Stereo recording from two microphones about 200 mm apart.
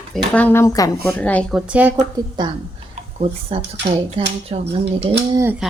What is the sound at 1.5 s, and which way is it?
Speech, 5° right (ahead or behind).